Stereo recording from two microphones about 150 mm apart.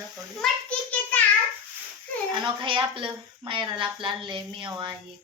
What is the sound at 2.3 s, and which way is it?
A woman's voice, 35° right (ahead or behind).